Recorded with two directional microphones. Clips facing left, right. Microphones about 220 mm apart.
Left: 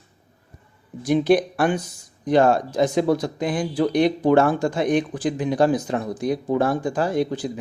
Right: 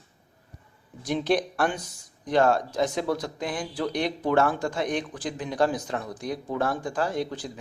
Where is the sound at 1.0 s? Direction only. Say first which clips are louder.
Left 7 dB; 5° left (ahead or behind).